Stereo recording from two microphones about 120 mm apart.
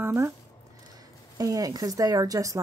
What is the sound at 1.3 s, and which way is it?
Speech, 30° right (ahead or behind).